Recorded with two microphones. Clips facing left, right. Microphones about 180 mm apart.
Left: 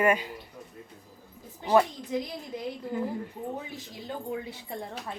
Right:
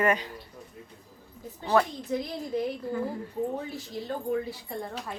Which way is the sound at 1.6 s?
15° left (ahead or behind).